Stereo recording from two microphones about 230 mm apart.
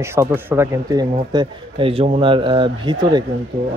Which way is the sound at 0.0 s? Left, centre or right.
Centre.